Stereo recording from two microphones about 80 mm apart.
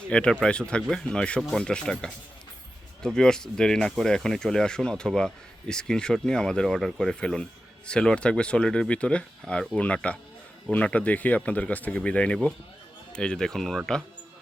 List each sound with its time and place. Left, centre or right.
0.1 s speech: centre